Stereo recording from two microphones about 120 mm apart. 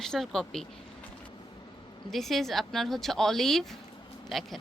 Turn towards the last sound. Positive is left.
turn(degrees=0)  # may be behind; listen again after turning